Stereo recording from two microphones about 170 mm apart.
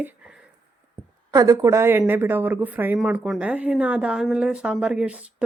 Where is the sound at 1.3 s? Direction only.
20° right (ahead or behind).